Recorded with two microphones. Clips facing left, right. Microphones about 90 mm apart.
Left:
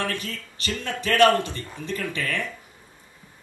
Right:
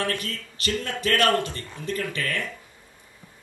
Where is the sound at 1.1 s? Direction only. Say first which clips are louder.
Left 4 dB; 25° left (ahead or behind).